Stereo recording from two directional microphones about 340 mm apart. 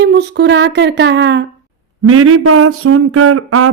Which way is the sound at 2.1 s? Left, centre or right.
Right.